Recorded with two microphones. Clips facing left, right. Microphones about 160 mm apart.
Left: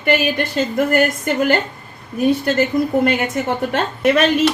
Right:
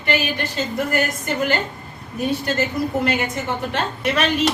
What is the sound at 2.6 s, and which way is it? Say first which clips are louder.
A woman's voice: left 5 dB; 55° left (ahead or behind).